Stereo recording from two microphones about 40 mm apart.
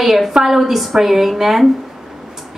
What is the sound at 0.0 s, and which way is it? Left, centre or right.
A woman's voice, centre.